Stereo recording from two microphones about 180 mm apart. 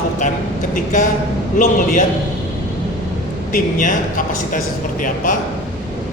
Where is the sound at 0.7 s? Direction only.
45° left (ahead or behind).